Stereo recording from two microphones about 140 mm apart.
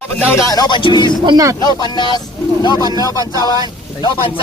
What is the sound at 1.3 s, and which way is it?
Speech, 25° right (ahead or behind).